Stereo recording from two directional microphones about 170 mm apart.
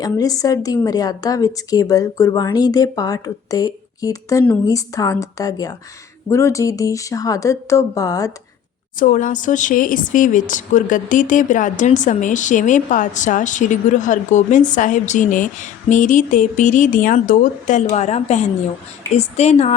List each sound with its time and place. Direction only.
0.0 s a woman's voice: 20° left (ahead or behind)
9.0 s a woman's voice: 50° left (ahead or behind)